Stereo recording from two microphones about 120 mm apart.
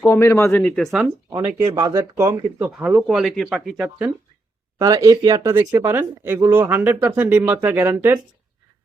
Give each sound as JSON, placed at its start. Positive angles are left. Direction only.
{"t": 0.0, "sound": "speech", "side_deg": 20}
{"t": 0.8, "sound": "speech", "side_deg": 0}
{"t": 1.3, "sound": "speech", "side_deg": -35}
{"t": 3.1, "sound": "speech", "side_deg": 0}
{"t": 4.8, "sound": "speech", "side_deg": -30}